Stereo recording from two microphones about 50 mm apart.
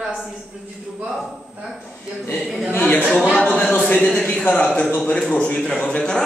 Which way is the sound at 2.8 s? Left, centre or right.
Left.